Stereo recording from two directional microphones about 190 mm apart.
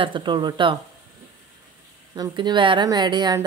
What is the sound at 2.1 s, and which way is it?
Speech, 20° right (ahead or behind).